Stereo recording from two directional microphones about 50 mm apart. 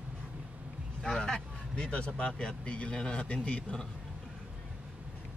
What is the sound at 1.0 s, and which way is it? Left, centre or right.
Speech, centre.